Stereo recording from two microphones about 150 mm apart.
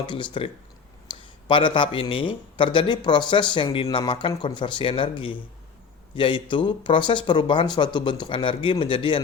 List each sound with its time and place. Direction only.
0.0 s speech: 35° left (ahead or behind)